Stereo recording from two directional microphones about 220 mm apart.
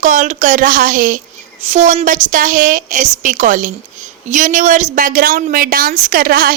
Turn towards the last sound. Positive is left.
turn(degrees=-40)  # may be behind; listen again after turning